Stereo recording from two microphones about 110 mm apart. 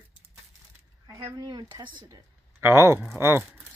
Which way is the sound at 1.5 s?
45° right (ahead or behind).